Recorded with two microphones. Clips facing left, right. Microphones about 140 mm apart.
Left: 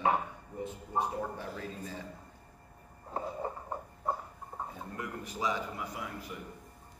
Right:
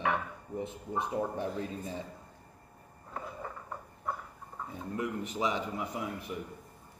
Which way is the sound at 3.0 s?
30° left (ahead or behind).